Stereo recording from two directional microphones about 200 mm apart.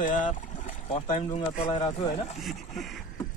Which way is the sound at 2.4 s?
Centre (ahead or behind).